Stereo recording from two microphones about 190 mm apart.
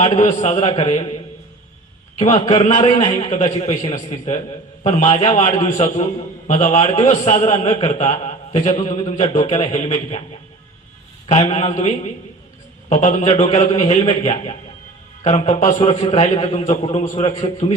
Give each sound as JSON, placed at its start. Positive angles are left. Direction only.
{"t": 0.3, "sound": "a man's voice", "side_deg": 30}
{"t": 2.1, "sound": "a man's voice", "side_deg": 35}
{"t": 11.3, "sound": "a man's voice", "side_deg": 35}